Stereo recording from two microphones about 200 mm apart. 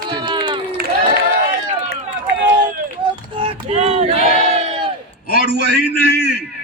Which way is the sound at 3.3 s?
30° right (ahead or behind).